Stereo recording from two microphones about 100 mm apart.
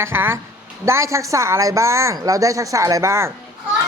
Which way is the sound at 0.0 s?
25° right (ahead or behind).